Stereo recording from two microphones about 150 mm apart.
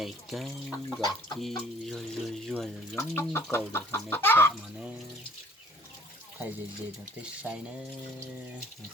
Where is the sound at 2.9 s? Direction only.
15° left (ahead or behind).